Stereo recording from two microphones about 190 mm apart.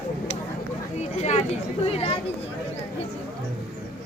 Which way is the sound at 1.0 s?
35° left (ahead or behind).